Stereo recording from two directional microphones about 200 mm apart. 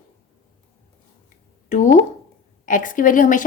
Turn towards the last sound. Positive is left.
turn(degrees=40)  # may be behind; listen again after turning